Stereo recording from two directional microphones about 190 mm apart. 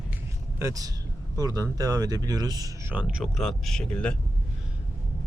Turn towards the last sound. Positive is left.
turn(degrees=5)  # may be behind; listen again after turning